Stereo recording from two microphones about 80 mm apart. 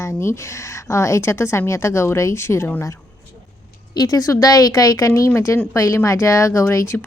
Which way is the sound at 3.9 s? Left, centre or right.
Left.